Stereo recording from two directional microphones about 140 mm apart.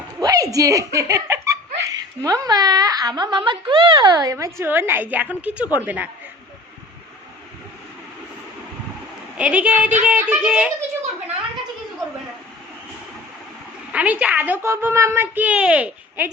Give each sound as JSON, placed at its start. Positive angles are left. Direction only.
{"t": 0.2, "sound": "a woman's voice", "side_deg": -25}
{"t": 9.4, "sound": "a woman's voice", "side_deg": -10}
{"t": 13.9, "sound": "a woman's voice", "side_deg": -10}